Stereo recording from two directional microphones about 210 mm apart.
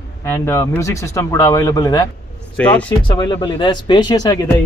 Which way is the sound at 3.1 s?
20° left (ahead or behind).